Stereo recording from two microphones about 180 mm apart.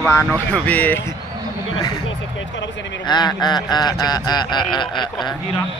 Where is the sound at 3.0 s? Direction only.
25° left (ahead or behind).